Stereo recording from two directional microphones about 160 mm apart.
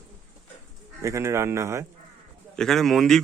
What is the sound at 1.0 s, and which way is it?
Speech, 20° right (ahead or behind).